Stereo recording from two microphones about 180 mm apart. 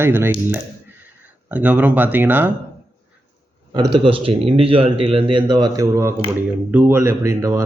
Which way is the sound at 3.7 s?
25° right (ahead or behind).